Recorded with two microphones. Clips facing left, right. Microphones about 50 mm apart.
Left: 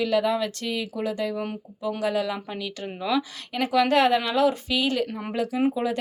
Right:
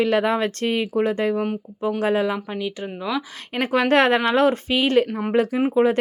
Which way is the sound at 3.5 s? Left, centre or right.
Right.